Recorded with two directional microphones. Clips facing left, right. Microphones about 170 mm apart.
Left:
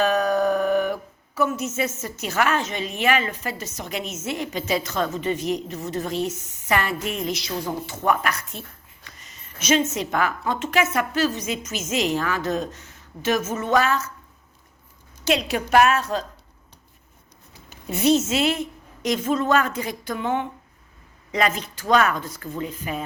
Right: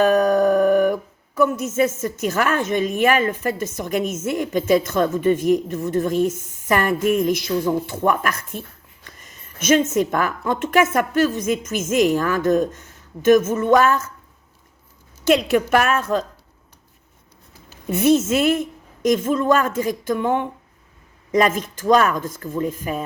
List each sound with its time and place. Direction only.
0.0 s howl: 50° right (ahead or behind)
1.4 s a woman's voice: 50° right (ahead or behind)
15.2 s a woman's voice: 50° right (ahead or behind)
17.8 s a woman's voice: 55° right (ahead or behind)